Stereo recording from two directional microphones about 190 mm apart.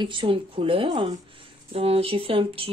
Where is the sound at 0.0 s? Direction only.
25° right (ahead or behind).